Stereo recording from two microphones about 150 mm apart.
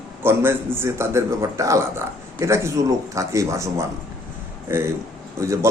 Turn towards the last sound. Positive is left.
turn(degrees=-20)  # may be behind; listen again after turning